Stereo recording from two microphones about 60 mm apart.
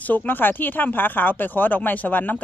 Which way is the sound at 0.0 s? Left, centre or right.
Left.